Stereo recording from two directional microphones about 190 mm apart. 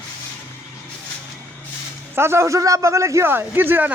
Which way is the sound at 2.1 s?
15° right (ahead or behind).